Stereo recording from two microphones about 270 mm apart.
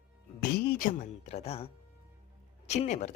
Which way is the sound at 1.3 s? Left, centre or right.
Left.